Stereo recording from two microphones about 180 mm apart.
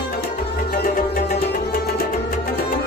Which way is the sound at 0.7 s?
50° left (ahead or behind).